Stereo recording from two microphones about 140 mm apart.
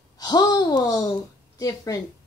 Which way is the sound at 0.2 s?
30° left (ahead or behind).